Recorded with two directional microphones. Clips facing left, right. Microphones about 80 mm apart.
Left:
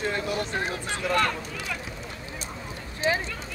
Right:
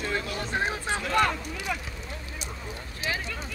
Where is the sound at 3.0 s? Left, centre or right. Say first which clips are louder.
Left 7 dB; left.